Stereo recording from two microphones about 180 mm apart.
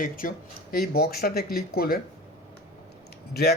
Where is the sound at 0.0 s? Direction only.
50° left (ahead or behind).